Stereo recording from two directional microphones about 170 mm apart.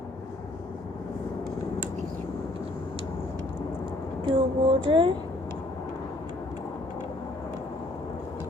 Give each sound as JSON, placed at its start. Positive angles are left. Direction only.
{"t": 4.3, "sound": "speech", "side_deg": -30}